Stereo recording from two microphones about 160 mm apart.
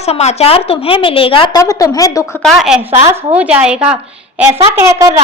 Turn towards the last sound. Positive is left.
turn(degrees=-20)  # may be behind; listen again after turning